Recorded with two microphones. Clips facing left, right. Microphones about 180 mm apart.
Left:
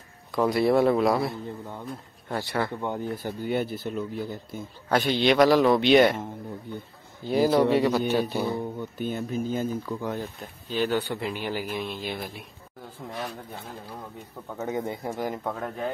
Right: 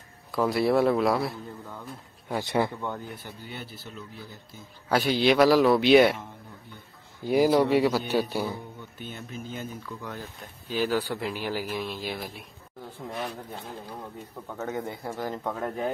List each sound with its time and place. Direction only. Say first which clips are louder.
0.4 s a man's voice: left 2 dB; centre (ahead or behind)
2.2 s speech: right 2 dB; 15° right (ahead or behind)
3.3 s speech: left 13 dB; 50° left (ahead or behind)
4.8 s a man's voice: even; 5° right (ahead or behind)
7.2 s speech: even; 10° right (ahead or behind)
9.0 s speech: left 10 dB; 40° left (ahead or behind)
10.7 s a man's voice: left 1 dB; 5° right (ahead or behind)
14.6 s speech: left 3 dB; 20° left (ahead or behind)
15.4 s a man's voice: right 1 dB; 5° right (ahead or behind)